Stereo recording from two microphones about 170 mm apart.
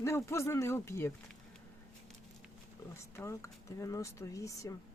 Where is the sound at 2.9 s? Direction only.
15° left (ahead or behind).